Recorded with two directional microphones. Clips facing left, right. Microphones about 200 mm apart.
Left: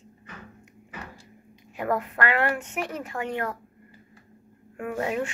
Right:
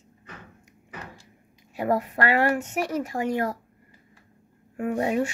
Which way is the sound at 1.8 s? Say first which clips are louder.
Right 2 dB; 35° right (ahead or behind).